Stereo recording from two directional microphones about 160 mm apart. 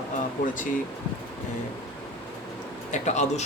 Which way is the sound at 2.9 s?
45° left (ahead or behind).